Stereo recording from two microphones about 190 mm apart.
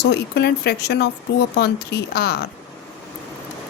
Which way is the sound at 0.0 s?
60° left (ahead or behind).